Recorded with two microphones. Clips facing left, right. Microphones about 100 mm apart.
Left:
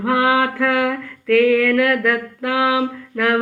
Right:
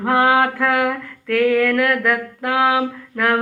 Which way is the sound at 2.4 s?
45° right (ahead or behind).